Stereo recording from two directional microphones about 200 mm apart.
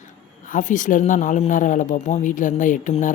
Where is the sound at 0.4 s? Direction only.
40° left (ahead or behind).